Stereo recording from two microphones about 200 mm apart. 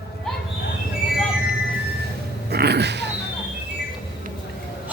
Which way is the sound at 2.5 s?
55° right (ahead or behind).